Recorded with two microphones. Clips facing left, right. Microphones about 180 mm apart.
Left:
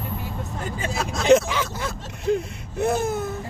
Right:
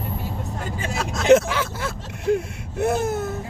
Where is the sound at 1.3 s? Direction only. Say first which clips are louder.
Right 2 dB; 10° right (ahead or behind).